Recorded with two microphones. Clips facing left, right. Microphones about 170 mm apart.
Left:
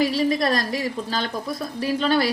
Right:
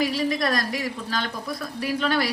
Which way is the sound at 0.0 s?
30° left (ahead or behind).